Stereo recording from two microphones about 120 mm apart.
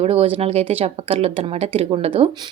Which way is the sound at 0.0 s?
55° right (ahead or behind).